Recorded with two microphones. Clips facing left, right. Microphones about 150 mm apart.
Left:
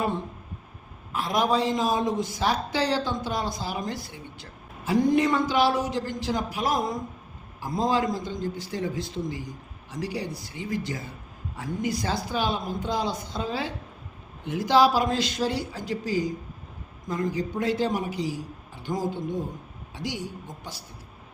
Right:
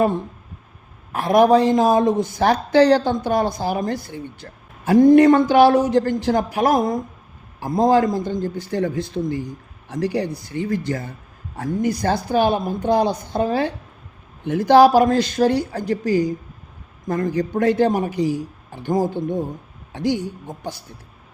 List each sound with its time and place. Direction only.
1.1 s a woman's voice: 55° right (ahead or behind)